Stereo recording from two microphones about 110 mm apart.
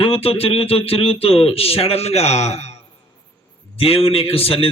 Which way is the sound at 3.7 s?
60° left (ahead or behind).